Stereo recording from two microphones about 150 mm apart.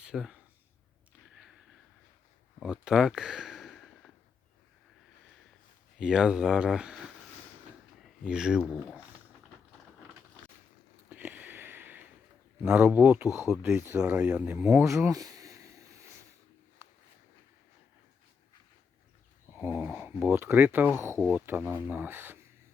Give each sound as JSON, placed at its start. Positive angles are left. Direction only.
{"t": 0.0, "sound": "a sound", "side_deg": -5}
{"t": 2.6, "sound": "speech", "side_deg": -5}
{"t": 6.0, "sound": "speech", "side_deg": -5}
{"t": 8.3, "sound": "speech", "side_deg": -5}
{"t": 11.1, "sound": "a sound", "side_deg": -10}
{"t": 12.6, "sound": "speech", "side_deg": -10}
{"t": 19.5, "sound": "speech", "side_deg": -10}